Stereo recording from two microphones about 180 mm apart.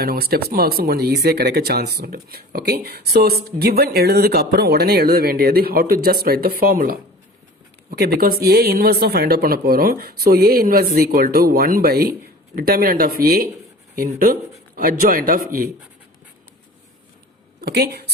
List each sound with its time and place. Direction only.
0.0 s a man's voice: 60° right (ahead or behind)
17.6 s a woman's voice: 60° right (ahead or behind)